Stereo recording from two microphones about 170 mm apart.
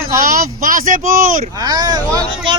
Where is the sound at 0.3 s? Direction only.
55° right (ahead or behind).